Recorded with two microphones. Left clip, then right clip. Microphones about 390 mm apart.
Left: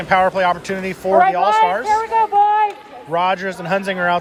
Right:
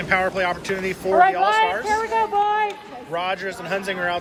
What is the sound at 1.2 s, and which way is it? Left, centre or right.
Speech, left.